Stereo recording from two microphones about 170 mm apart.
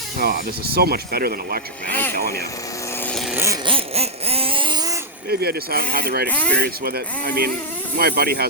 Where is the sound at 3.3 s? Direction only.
15° right (ahead or behind).